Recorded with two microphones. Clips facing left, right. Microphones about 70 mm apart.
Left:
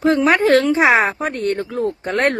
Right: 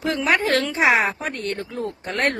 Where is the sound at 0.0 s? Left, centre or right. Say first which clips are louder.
Left 6 dB; left.